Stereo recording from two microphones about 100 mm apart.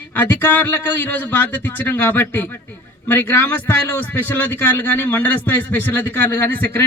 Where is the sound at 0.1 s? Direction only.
20° left (ahead or behind).